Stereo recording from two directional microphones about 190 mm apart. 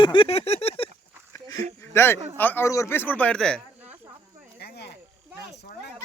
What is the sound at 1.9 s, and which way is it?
Speech, 10° left (ahead or behind).